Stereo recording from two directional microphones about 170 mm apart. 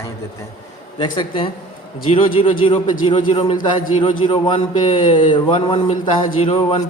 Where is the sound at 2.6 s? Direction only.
30° left (ahead or behind).